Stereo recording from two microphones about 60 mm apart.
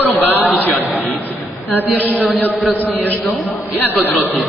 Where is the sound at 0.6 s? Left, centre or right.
Left.